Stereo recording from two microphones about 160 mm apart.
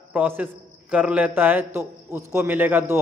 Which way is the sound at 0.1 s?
10° right (ahead or behind).